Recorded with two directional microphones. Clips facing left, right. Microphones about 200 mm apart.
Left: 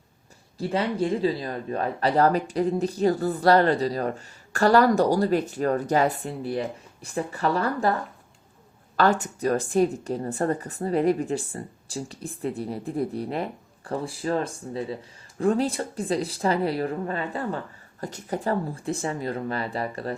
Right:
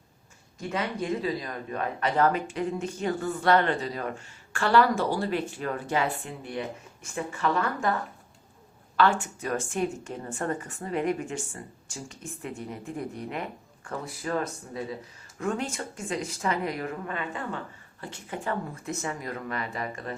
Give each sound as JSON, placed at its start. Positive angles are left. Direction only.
{"t": 0.6, "sound": "speech", "side_deg": 30}
{"t": 9.0, "sound": "speech", "side_deg": 40}